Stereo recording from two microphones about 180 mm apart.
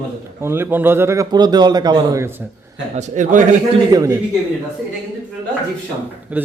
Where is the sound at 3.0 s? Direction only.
40° right (ahead or behind).